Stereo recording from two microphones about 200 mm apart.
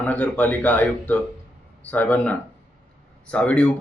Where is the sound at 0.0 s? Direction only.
10° left (ahead or behind).